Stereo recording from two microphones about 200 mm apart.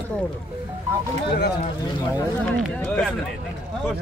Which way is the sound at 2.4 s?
5° left (ahead or behind).